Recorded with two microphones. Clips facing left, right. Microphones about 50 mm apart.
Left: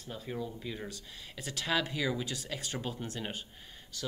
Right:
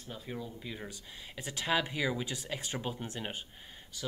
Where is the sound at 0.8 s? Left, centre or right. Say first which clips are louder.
Left 1 dB; centre.